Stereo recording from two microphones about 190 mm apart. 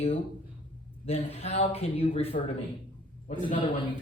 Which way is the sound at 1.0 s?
30° left (ahead or behind).